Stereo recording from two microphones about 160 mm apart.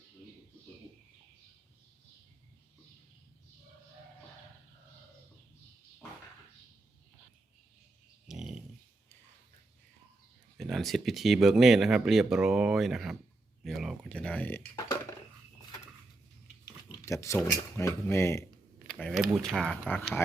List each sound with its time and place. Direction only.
8.3 s dog: 5° right (ahead or behind)
10.6 s speech: centre (ahead or behind)
17.1 s speech: 20° left (ahead or behind)
18.9 s speech: 5° left (ahead or behind)